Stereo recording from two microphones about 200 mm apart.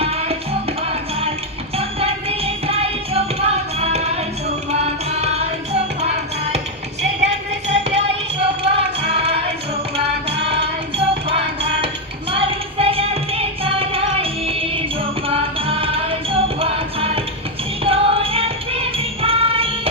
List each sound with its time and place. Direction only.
0.0 s music: 30° right (ahead or behind)
1.7 s music: 30° right (ahead or behind)
7.0 s a sound: 35° right (ahead or behind)
8.6 s music: 30° right (ahead or behind)